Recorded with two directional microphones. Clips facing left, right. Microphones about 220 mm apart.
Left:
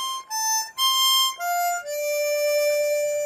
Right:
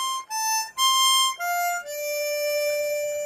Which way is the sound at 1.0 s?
40° left (ahead or behind).